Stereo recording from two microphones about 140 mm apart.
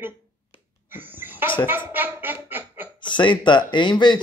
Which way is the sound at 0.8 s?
15° right (ahead or behind).